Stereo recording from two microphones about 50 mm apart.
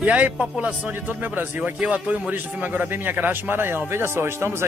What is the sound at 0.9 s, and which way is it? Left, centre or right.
Speech, right.